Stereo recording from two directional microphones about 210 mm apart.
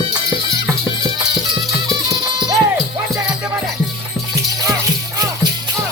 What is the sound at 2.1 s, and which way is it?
Music, 20° right (ahead or behind).